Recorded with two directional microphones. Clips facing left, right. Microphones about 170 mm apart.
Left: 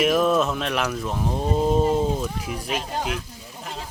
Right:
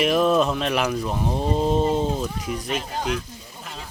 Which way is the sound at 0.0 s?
5° left (ahead or behind).